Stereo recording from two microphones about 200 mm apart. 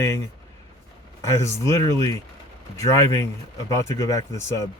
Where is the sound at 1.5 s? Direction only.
15° left (ahead or behind).